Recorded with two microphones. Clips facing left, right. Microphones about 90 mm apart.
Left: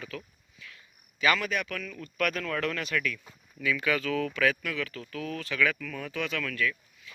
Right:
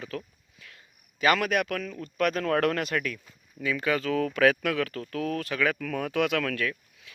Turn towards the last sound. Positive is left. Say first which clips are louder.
# even
turn(degrees=-60)  # may be behind; listen again after turning